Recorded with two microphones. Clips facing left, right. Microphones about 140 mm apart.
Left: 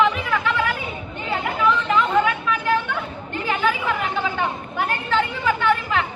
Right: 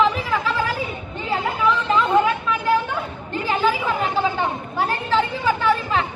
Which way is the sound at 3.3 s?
35° right (ahead or behind).